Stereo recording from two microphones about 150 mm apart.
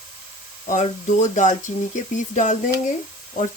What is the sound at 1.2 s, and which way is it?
Speech, 55° left (ahead or behind).